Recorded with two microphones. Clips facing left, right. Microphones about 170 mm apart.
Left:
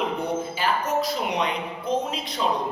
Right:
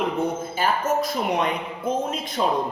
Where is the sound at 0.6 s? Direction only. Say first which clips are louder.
Right 4 dB; 50° right (ahead or behind).